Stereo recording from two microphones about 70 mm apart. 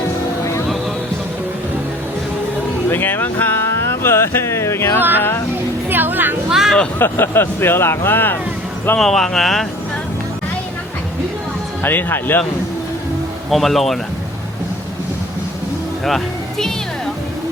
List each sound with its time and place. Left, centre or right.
2.9 s speech: left
4.9 s speech: right
5.9 s music: right
6.5 s speech: centre
7.0 s speech: left
9.0 s speech: centre
11.8 s speech: left
13.5 s speech: centre
16.0 s speech: centre